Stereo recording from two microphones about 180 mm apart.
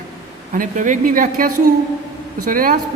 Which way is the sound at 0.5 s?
45° right (ahead or behind).